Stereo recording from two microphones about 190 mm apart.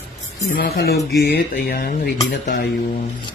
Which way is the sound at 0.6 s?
55° left (ahead or behind).